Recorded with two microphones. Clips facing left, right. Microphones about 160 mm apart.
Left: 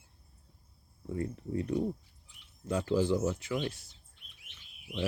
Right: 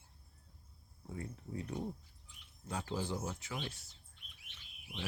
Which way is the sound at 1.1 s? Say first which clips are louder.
Left 10 dB; 60° left (ahead or behind).